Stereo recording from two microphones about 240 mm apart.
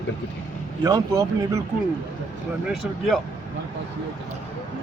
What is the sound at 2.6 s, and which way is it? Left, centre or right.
Speech, centre.